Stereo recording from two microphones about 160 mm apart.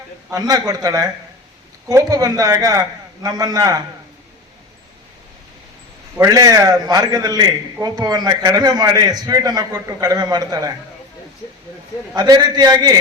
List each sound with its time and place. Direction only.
0.3 s a man's voice: 25° right (ahead or behind)
6.1 s a man's voice: 20° right (ahead or behind)
12.1 s a man's voice: 25° right (ahead or behind)